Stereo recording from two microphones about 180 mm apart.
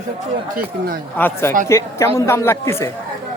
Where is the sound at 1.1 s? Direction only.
10° left (ahead or behind).